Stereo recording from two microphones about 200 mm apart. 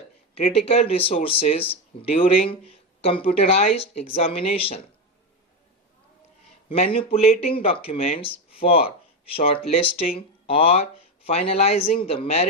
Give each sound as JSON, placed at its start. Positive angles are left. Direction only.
{"t": 0.3, "sound": "speech", "side_deg": 30}
{"t": 6.7, "sound": "speech", "side_deg": 30}